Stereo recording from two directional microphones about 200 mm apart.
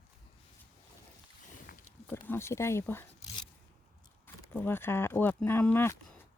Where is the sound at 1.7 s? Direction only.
50° left (ahead or behind).